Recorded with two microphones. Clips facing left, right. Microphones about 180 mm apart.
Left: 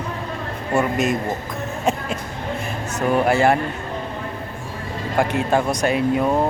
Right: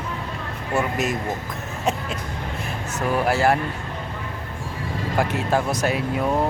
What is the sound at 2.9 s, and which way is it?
Speech, centre (ahead or behind).